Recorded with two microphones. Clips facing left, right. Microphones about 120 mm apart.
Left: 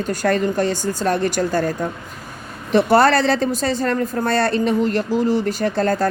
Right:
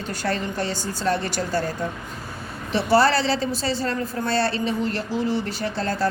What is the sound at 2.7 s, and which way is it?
Speech, 50° left (ahead or behind).